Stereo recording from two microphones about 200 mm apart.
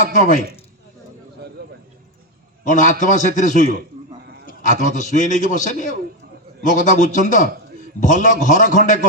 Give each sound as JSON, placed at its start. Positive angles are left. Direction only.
{"t": 0.0, "sound": "a man's voice", "side_deg": 40}
{"t": 1.6, "sound": "a sound", "side_deg": -55}
{"t": 2.6, "sound": "a man's voice", "side_deg": 40}